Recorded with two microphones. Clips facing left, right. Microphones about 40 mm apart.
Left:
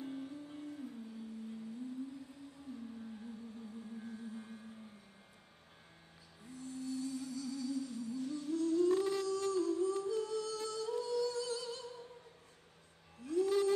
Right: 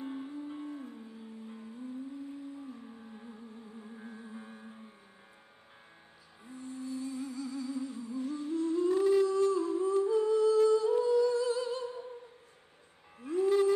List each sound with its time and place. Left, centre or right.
0.0 s music: right
4.0 s music: right
6.4 s music: right
13.2 s music: right